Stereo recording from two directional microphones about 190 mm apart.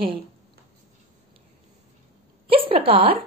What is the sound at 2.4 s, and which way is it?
Speech, 30° right (ahead or behind).